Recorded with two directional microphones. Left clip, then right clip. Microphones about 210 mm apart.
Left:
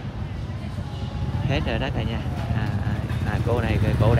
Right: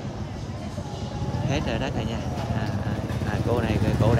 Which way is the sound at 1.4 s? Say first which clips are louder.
Left 2 dB; 10° right (ahead or behind).